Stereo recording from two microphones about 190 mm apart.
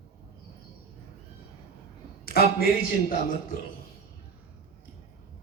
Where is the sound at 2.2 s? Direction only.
55° left (ahead or behind).